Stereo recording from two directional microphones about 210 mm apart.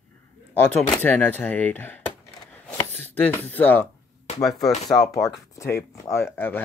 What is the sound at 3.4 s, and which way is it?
Speech, 10° left (ahead or behind).